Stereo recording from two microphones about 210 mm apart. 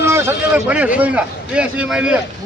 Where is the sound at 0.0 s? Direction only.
10° right (ahead or behind).